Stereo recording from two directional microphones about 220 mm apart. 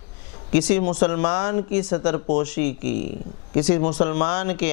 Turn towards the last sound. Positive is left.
turn(degrees=10)  # may be behind; listen again after turning